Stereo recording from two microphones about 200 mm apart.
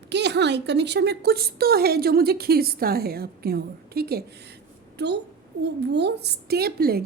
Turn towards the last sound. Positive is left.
turn(degrees=-50)  # may be behind; listen again after turning